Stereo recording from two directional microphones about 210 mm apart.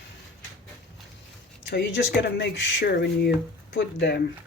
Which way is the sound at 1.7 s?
50° left (ahead or behind).